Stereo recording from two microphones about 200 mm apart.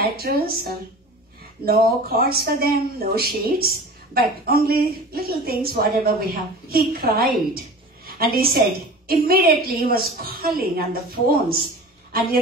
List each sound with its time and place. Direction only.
0.0 s a woman's voice: 50° right (ahead or behind)